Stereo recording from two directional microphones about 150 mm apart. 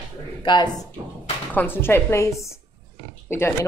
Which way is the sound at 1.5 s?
15° left (ahead or behind).